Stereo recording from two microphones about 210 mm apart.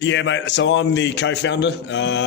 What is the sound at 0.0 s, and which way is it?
A man's voice, 60° left (ahead or behind).